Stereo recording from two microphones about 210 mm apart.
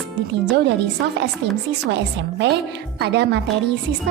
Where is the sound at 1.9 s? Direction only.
55° right (ahead or behind).